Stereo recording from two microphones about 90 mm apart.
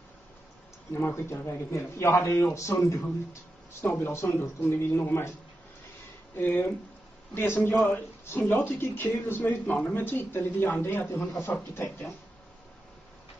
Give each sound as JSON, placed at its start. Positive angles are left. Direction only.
{"t": 0.9, "sound": "a man's voice", "side_deg": 25}
{"t": 6.3, "sound": "speech", "side_deg": 20}